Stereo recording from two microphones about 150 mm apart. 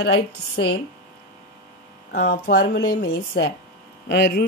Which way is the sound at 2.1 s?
90° left.